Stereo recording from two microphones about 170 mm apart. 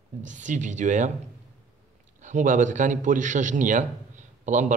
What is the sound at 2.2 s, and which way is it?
A man's voice, 50° right (ahead or behind).